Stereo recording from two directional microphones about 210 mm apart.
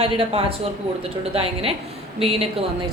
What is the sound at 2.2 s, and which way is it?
Speech, 25° right (ahead or behind).